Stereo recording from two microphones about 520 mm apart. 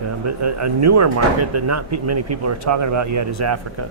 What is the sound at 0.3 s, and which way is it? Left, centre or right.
Speech, right.